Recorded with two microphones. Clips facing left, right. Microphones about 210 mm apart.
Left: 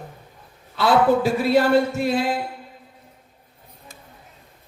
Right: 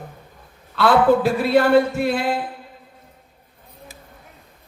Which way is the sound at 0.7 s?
55° right (ahead or behind).